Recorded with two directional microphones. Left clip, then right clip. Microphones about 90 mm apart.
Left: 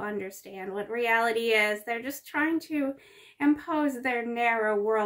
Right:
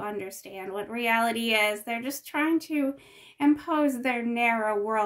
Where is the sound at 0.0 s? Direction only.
40° right (ahead or behind).